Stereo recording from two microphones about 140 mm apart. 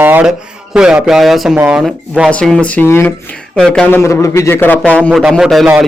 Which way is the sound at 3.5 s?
5° left (ahead or behind).